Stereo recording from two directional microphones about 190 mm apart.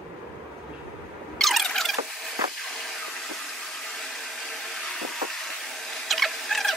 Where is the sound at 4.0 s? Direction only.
Centre (ahead or behind).